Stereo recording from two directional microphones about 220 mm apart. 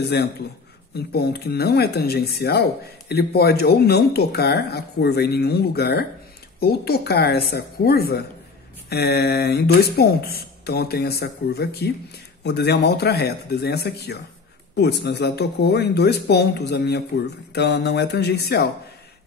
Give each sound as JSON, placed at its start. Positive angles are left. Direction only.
{"t": 0.0, "sound": "speech", "side_deg": 45}